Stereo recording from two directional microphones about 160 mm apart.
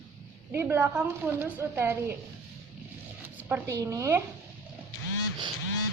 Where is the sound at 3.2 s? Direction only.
15° right (ahead or behind).